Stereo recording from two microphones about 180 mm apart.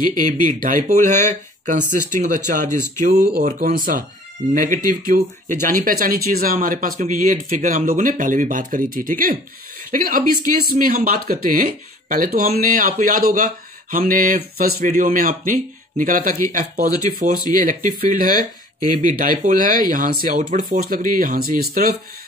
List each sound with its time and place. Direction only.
0.1 s speech: 45° right (ahead or behind)
3.3 s speech: 60° right (ahead or behind)